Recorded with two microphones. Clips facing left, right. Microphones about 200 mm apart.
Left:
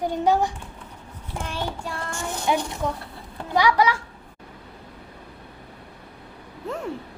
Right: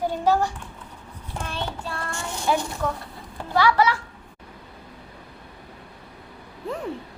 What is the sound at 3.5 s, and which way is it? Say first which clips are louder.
Speech: even; 15° left (ahead or behind).